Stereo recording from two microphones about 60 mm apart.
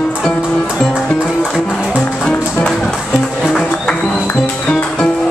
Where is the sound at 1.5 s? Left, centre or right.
Centre.